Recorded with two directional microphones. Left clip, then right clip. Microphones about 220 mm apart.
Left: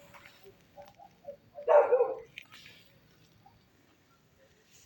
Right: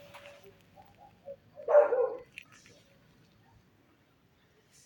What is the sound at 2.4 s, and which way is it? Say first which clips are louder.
Squish: even; centre (ahead or behind).